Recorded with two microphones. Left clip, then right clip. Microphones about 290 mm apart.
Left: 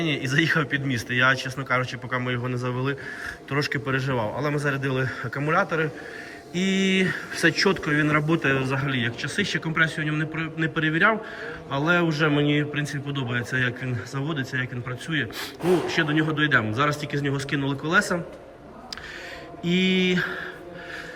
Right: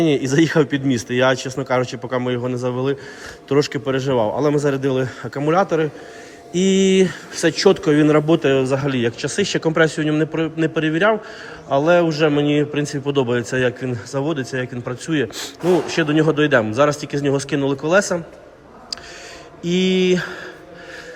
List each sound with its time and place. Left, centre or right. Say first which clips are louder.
0.0 s a man's voice: right 7 dB; centre
19.6 s speech: right 5 dB; centre